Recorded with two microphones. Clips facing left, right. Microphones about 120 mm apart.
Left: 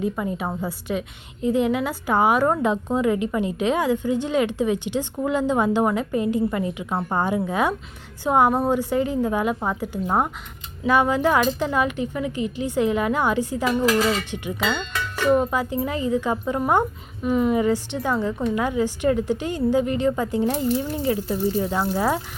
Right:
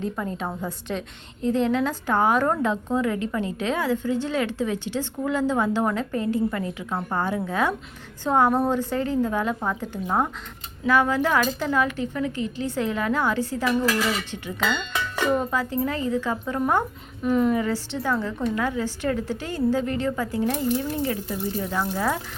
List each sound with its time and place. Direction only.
0.0 s a woman's voice: 10° left (ahead or behind); by 14.2 s 25° left (ahead or behind)
14.9 s dishes: 15° right (ahead or behind)
15.3 s a woman's voice: 15° left (ahead or behind)
17.6 s a woman's voice: 15° left (ahead or behind)